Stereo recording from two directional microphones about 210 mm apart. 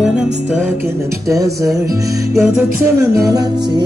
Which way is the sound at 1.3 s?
15° right (ahead or behind).